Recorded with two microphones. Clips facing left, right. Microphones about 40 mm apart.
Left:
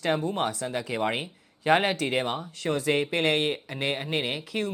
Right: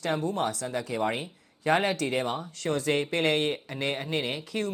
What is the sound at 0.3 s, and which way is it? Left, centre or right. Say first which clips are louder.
Speech: left 1 dB; left.